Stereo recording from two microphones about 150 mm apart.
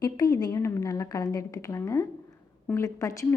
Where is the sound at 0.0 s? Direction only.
25° left (ahead or behind).